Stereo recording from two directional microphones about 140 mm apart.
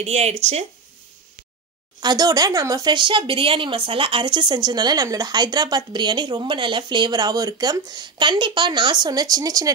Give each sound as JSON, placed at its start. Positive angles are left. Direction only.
{"t": 0.0, "sound": "speech", "side_deg": -50}
{"t": 2.0, "sound": "speech", "side_deg": -30}